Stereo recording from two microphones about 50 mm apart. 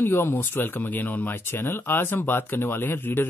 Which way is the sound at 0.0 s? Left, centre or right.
Left.